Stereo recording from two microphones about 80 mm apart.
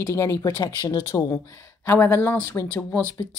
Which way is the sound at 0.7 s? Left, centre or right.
Left.